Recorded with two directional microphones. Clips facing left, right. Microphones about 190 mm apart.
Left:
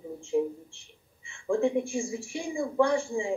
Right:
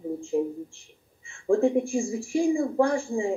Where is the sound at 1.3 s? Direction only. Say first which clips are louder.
Right 4 dB; 35° right (ahead or behind).